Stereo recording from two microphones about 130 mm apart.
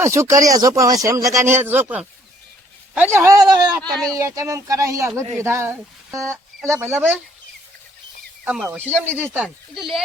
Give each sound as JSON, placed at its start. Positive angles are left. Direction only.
{"t": 0.0, "sound": "speech", "side_deg": -20}
{"t": 6.2, "sound": "a sound", "side_deg": 5}
{"t": 6.7, "sound": "speech", "side_deg": -15}
{"t": 8.5, "sound": "speech", "side_deg": -10}